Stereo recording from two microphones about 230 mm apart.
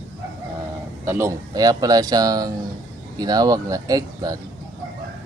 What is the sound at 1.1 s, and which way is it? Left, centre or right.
Speech, centre.